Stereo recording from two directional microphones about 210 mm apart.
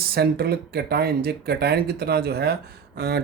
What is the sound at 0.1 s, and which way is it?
Speech, 50° right (ahead or behind).